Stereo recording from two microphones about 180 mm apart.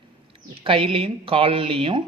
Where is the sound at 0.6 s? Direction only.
30° right (ahead or behind).